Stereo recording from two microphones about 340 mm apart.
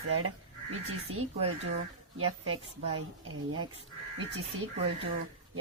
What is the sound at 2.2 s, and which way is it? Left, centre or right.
Speech, right.